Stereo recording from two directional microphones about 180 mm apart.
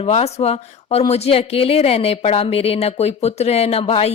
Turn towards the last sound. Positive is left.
turn(degrees=35)  # may be behind; listen again after turning